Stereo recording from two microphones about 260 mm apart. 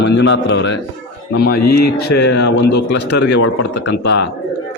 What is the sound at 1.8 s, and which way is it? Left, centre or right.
Speech, left.